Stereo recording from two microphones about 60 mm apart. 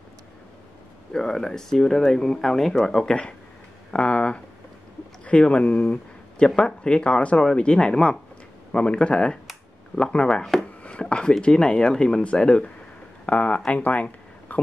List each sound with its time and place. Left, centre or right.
1.1 s speech: centre
3.9 s speech: centre
10.8 s chopping: centre
11.4 s speech: centre
13.7 s a sound: left